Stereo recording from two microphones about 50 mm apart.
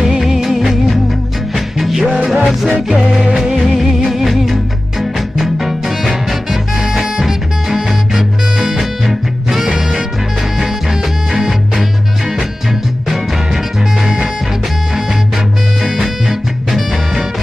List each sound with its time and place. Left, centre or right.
0.2 s music: centre
2.0 s music: centre
3.2 s music of bollywood: centre
4.1 s music: centre
5.4 s swing music: centre
9.8 s music: centre
14.0 s music: centre
15.8 s music: centre